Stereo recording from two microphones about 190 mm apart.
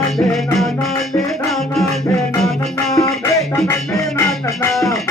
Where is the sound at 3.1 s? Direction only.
15° left (ahead or behind).